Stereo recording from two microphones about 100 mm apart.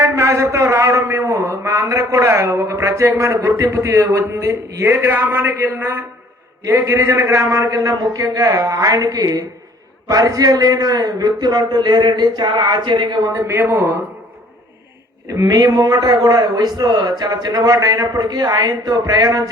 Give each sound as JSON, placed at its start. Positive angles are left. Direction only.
{"t": 0.0, "sound": "a man's voice", "side_deg": -30}
{"t": 13.3, "sound": "a man's voice", "side_deg": -25}
{"t": 15.4, "sound": "a man's voice", "side_deg": -40}